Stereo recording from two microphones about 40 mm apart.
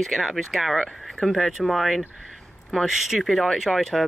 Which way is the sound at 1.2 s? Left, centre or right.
Centre.